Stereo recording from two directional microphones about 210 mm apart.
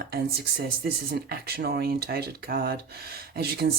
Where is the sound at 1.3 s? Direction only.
50° right (ahead or behind).